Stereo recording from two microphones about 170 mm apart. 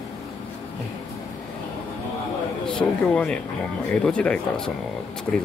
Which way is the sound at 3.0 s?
5° left (ahead or behind).